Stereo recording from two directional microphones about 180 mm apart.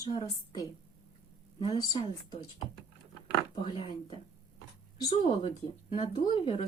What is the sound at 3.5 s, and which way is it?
Speech, 30° left (ahead or behind).